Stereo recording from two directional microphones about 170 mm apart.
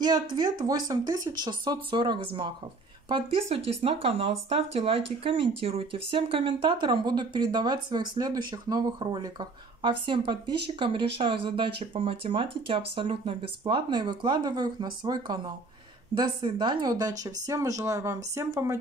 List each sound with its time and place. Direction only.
0.0 s speech: 25° right (ahead or behind)